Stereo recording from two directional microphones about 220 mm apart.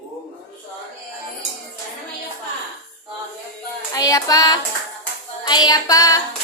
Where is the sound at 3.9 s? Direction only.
15° left (ahead or behind).